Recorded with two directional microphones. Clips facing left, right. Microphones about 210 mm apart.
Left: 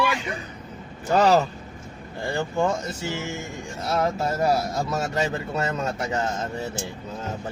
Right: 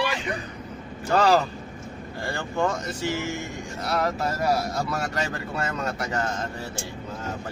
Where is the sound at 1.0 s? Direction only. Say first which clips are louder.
Left 2 dB; 20° left (ahead or behind).